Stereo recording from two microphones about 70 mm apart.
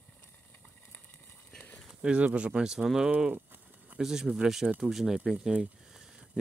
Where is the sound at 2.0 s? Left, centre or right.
Centre.